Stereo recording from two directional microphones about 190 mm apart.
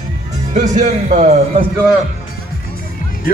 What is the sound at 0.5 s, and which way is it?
Speech, 40° right (ahead or behind).